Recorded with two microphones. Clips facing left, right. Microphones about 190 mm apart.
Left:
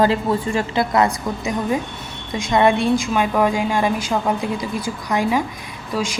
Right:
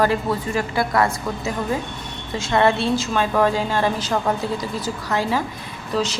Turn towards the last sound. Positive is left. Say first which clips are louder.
# right 1 dB
turn(degrees=10)  # may be behind; listen again after turning